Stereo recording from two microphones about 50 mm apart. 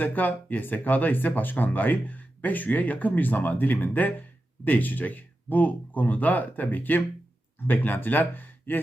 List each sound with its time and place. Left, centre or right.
0.0 s speech: left